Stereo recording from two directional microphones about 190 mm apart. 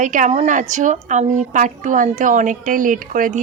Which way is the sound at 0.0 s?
40° right (ahead or behind).